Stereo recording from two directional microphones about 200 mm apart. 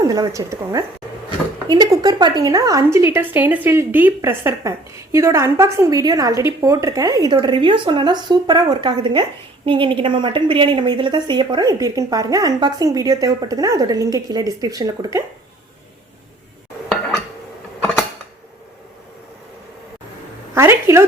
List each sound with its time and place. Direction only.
0.0 s a woman's voice: 20° right (ahead or behind)
20.6 s a woman's voice: 15° right (ahead or behind)